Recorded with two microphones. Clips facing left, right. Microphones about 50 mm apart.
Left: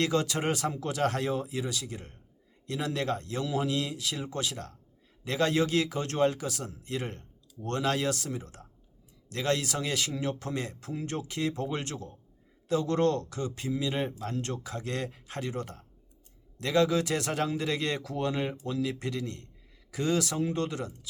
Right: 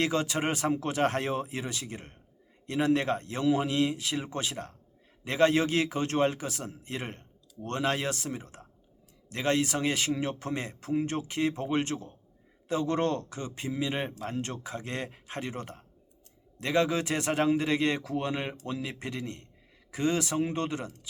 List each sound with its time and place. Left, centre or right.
0.0 s a man's voice: right